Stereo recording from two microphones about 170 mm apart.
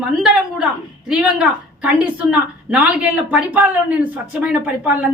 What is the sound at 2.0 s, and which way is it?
Speech, 10° right (ahead or behind).